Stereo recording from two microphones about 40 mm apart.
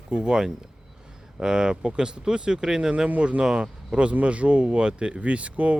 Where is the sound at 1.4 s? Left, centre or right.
Centre.